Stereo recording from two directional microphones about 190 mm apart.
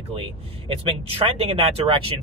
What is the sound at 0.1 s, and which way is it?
Speech, 30° right (ahead or behind).